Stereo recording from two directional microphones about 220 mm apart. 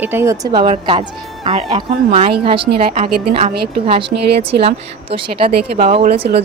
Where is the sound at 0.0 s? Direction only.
10° right (ahead or behind).